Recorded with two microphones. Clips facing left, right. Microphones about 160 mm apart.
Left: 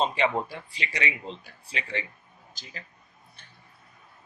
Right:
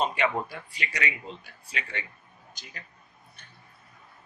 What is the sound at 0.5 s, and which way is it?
Speech, 25° left (ahead or behind).